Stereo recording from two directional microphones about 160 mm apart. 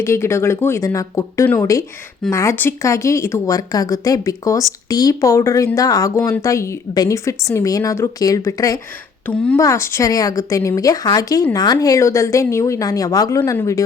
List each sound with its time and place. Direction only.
0.0 s speech: 15° left (ahead or behind)
9.2 s speech: 10° left (ahead or behind)